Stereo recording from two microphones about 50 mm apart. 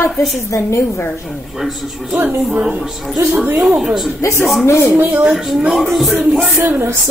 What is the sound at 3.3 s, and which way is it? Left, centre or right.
Speech, right.